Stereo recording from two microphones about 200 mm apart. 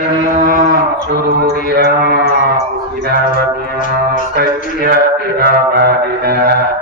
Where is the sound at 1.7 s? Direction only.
50° right (ahead or behind).